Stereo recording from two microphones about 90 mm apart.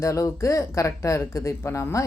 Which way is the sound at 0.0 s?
35° left (ahead or behind).